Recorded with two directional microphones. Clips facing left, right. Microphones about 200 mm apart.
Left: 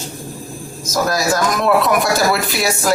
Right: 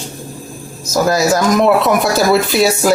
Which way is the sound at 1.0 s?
25° right (ahead or behind).